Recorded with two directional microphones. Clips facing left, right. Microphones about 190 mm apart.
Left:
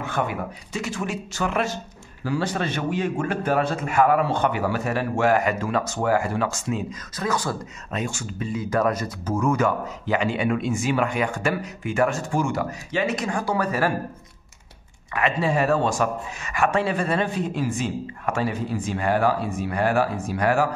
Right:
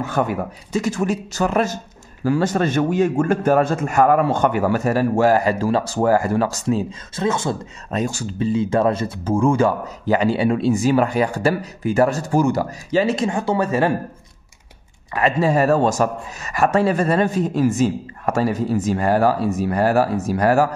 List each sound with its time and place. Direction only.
0.0 s a man's voice: 40° right (ahead or behind); by 7.5 s 25° right (ahead or behind)
7.9 s speech: 35° right (ahead or behind)
15.1 s speech: 40° right (ahead or behind)